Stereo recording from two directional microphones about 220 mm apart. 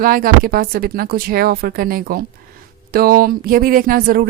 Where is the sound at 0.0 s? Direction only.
40° right (ahead or behind).